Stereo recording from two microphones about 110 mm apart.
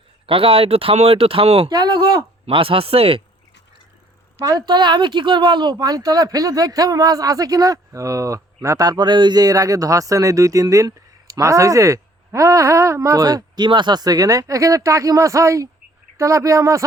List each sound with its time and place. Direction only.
0.3 s speech: 60° right (ahead or behind)
1.7 s speech: 40° right (ahead or behind)
2.5 s speech: 55° right (ahead or behind)
4.4 s speech: 40° right (ahead or behind)